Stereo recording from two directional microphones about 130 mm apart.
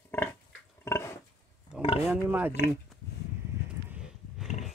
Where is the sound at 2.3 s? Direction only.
15° right (ahead or behind).